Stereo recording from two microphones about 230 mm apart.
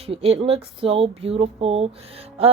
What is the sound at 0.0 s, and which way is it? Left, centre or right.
A woman's voice, right.